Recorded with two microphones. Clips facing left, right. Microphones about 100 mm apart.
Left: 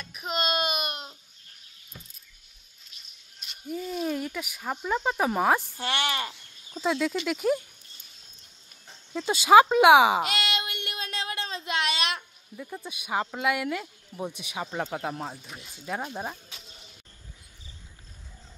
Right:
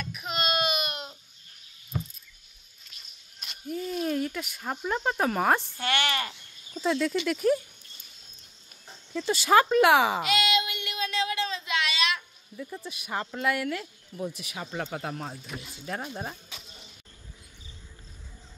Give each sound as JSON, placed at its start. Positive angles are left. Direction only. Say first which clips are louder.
{"t": 0.2, "sound": "baby cry", "louder": "left 1 dB", "side_deg": 40}
{"t": 1.9, "sound": "a sound", "louder": "right 15 dB", "side_deg": -65}
{"t": 3.6, "sound": "speech", "louder": "even", "side_deg": 5}
{"t": 5.8, "sound": "speech", "louder": "right 1 dB", "side_deg": 25}
{"t": 6.8, "sound": "speech", "louder": "even", "side_deg": 10}
{"t": 9.1, "sound": "speech", "louder": "left 4 dB", "side_deg": 20}
{"t": 10.2, "sound": "a sound", "louder": "right 4 dB", "side_deg": 50}
{"t": 12.5, "sound": "speech", "louder": "even", "side_deg": 20}